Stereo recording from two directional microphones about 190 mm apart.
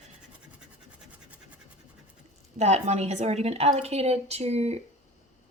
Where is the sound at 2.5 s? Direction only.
35° right (ahead or behind).